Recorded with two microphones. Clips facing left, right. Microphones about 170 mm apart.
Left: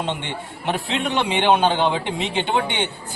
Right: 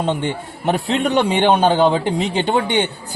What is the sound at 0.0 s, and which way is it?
A man's voice, 40° right (ahead or behind).